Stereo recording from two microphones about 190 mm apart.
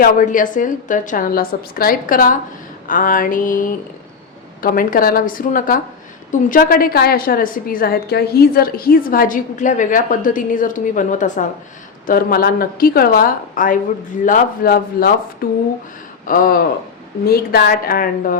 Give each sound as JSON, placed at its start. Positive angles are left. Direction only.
{"t": 0.0, "sound": "a woman's voice", "side_deg": 45}